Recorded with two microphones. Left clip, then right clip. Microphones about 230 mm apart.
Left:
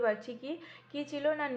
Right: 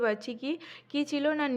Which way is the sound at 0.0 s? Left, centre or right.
Right.